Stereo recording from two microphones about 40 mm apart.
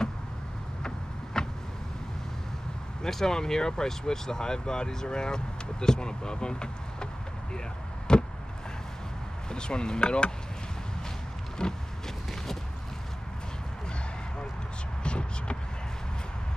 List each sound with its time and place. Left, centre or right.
0.8 s a sound: centre
3.0 s speech: centre
8.1 s vehicle: left
9.5 s speech: left
11.6 s speech: left
15.0 s a sound: left